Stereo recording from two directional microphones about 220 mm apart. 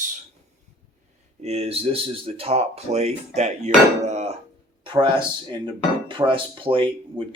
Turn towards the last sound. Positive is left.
turn(degrees=-25)  # may be behind; listen again after turning